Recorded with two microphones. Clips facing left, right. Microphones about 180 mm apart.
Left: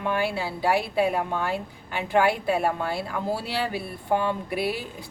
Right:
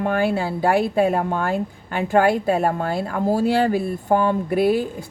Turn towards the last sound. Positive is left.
turn(degrees=-45)  # may be behind; listen again after turning